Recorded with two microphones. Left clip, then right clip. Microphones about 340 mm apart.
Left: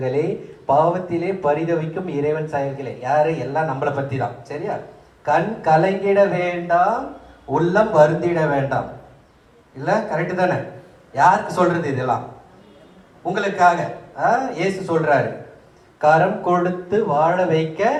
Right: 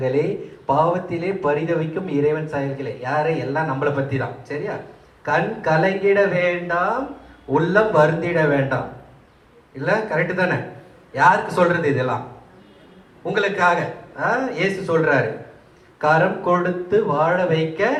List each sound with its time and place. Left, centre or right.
0.0 s a man's voice: centre
9.8 s a man's voice: centre
13.2 s a man's voice: centre